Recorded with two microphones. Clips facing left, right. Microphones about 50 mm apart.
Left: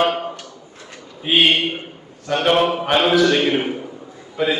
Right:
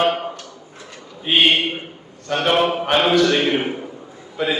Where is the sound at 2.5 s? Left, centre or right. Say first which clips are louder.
Left 1 dB; centre.